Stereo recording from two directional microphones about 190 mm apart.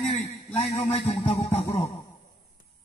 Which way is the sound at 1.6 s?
10° left (ahead or behind).